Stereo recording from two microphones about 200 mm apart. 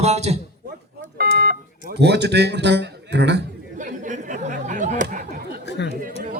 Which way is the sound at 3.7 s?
40° right (ahead or behind).